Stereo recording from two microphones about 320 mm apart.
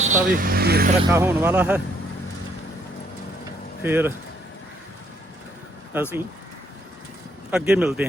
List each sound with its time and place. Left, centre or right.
0.0 s speech: right
1.1 s speech: centre
3.8 s speech: centre
5.9 s speech: centre
7.5 s speech: centre